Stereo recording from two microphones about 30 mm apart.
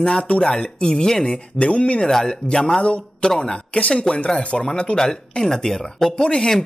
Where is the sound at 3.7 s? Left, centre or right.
Left.